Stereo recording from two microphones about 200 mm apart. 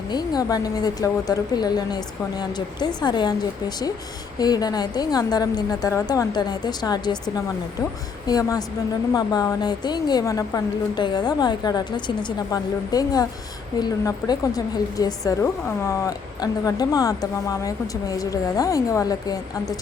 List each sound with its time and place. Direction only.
0.1 s a woman's voice: 20° left (ahead or behind)
4.4 s a woman's voice: 20° left (ahead or behind)